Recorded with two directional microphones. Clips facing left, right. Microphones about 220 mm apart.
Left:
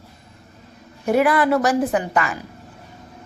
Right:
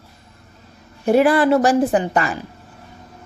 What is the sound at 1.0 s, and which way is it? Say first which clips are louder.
Speech: right 3 dB; 30° right (ahead or behind).